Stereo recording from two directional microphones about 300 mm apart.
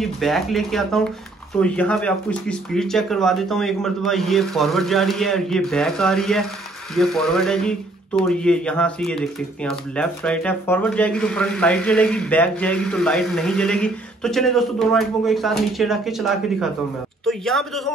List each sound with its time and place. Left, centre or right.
0.0 s speech: centre